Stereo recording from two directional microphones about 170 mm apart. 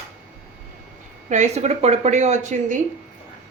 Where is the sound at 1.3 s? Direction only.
40° right (ahead or behind).